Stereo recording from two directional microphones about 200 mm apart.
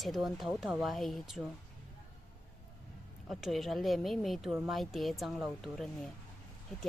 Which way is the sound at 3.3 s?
Centre (ahead or behind).